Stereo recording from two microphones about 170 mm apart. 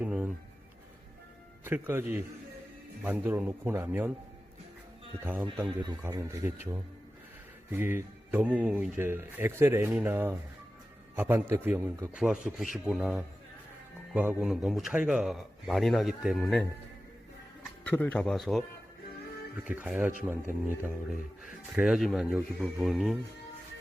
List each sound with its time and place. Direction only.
0.0 s music: 10° right (ahead or behind)
1.6 s speech: 10° right (ahead or behind)
5.2 s speech: 10° right (ahead or behind)
7.7 s speech: 15° right (ahead or behind)
12.1 s speech: 5° right (ahead or behind)
19.6 s speech: 10° right (ahead or behind)